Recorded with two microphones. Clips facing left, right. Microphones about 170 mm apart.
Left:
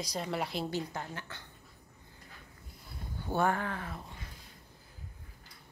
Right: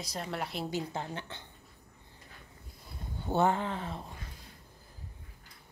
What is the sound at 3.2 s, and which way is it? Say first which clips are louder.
Speech: right 2 dB; 20° right (ahead or behind).